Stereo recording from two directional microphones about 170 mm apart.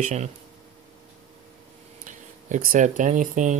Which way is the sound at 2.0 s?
50° right (ahead or behind).